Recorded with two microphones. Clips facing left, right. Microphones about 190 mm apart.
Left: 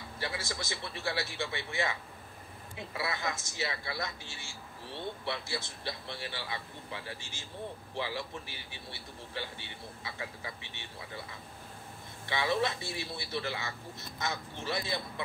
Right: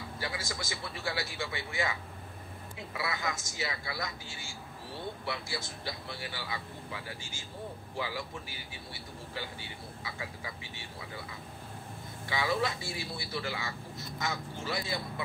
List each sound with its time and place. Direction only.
0.2 s a man's voice: 25° left (ahead or behind)
3.0 s a man's voice: 25° left (ahead or behind)
12.3 s a man's voice: 25° left (ahead or behind)